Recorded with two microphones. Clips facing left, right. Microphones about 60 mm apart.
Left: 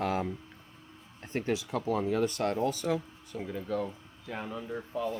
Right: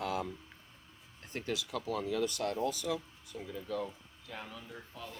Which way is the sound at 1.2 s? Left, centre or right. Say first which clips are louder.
Left 6 dB; left.